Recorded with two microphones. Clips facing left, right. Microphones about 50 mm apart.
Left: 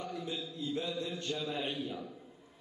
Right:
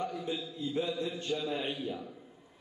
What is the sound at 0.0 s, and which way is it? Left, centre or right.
A man's voice, centre.